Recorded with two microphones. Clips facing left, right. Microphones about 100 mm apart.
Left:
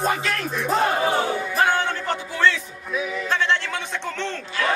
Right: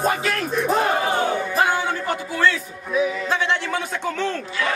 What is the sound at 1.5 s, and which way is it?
Music, 10° right (ahead or behind).